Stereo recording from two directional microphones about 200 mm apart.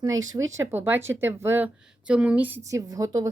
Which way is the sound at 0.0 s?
15° right (ahead or behind).